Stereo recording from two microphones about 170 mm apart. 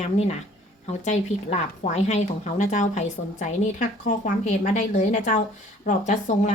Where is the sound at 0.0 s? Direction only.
40° left (ahead or behind).